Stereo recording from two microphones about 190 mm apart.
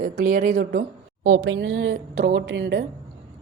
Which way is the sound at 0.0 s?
45° right (ahead or behind).